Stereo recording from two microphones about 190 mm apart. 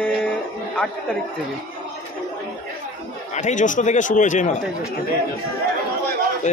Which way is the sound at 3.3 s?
40° left (ahead or behind).